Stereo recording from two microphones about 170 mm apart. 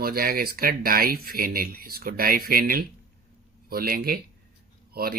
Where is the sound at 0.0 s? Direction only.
60° right (ahead or behind).